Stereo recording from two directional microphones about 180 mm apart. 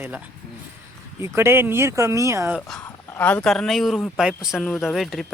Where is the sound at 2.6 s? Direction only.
5° left (ahead or behind).